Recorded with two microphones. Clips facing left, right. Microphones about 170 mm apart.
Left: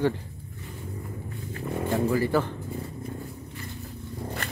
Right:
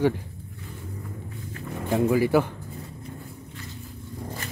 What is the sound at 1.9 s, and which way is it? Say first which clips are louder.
Speech: right 4 dB; 10° right (ahead or behind).